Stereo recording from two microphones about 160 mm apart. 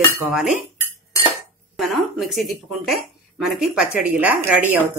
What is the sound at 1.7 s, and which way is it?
A woman's voice, centre (ahead or behind).